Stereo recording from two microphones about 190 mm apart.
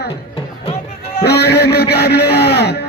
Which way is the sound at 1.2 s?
60° left (ahead or behind).